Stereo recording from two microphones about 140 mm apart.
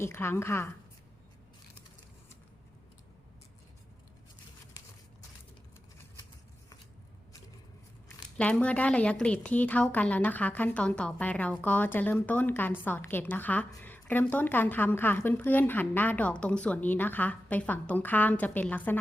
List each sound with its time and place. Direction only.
0.0 s a woman's voice: 20° left (ahead or behind)
8.4 s a woman's voice: 10° left (ahead or behind)